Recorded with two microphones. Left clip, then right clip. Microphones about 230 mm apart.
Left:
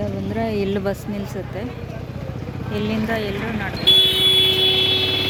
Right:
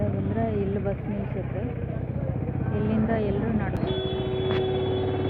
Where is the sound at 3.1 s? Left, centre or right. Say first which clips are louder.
Left 3 dB; centre.